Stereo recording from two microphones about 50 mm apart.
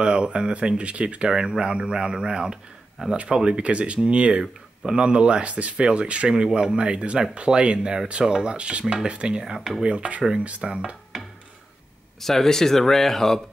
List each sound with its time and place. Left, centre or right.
0.0 s speech: centre
9.4 s speech: centre
9.8 s speech: right
10.6 s speech: centre
12.2 s speech: centre